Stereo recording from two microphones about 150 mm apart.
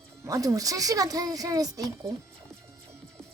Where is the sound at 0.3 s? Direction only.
25° right (ahead or behind).